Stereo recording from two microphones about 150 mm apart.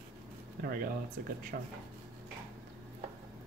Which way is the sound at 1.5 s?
90° right.